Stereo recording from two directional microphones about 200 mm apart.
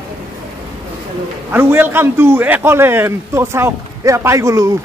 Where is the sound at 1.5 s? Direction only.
10° right (ahead or behind).